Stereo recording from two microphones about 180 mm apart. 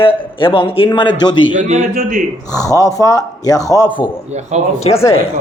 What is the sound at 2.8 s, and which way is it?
A man's voice, 20° left (ahead or behind).